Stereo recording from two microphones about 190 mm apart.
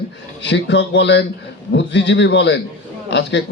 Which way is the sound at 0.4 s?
70° left (ahead or behind).